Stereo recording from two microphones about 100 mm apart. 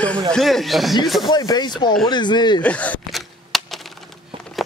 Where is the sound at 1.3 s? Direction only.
45° left (ahead or behind).